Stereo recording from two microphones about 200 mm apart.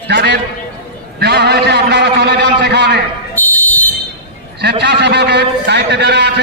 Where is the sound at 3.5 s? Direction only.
10° left (ahead or behind).